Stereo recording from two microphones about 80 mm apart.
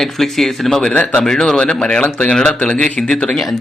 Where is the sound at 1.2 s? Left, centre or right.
Centre.